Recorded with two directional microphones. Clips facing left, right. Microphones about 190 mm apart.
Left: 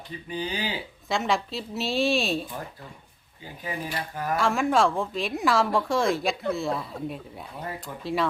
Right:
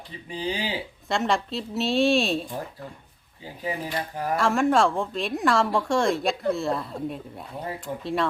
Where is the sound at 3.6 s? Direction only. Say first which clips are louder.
Right 3 dB; 25° right (ahead or behind).